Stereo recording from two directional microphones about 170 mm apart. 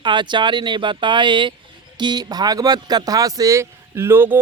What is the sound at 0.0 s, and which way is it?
Speech, 25° right (ahead or behind).